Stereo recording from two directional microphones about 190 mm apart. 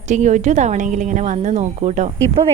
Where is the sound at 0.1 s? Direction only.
40° right (ahead or behind).